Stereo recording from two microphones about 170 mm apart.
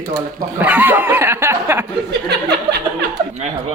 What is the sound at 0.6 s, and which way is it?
Speech, 10° right (ahead or behind).